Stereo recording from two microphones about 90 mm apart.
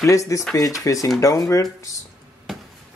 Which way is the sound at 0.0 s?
35° left (ahead or behind).